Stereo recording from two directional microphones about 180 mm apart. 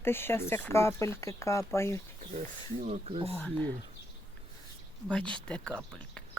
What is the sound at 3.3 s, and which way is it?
Speech, 5° left (ahead or behind).